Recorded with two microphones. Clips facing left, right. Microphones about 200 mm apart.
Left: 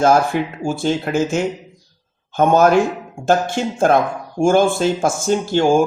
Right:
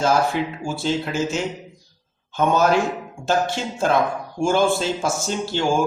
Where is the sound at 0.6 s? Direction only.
50° left (ahead or behind).